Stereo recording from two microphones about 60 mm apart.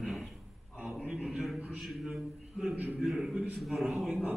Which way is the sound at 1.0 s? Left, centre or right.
Centre.